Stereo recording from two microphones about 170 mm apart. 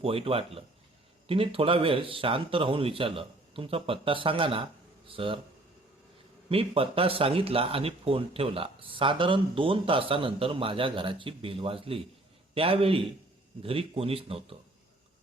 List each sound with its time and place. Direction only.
0.0 s speech: 35° right (ahead or behind)
6.5 s speech: 35° right (ahead or behind)